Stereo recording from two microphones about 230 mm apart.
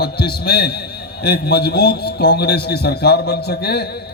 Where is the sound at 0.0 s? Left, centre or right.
Left.